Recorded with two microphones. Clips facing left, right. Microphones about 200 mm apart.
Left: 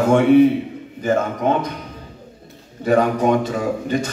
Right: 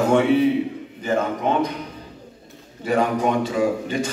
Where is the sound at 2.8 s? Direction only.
45° left (ahead or behind).